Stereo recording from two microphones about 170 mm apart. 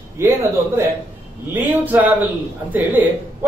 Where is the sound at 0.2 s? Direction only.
15° right (ahead or behind).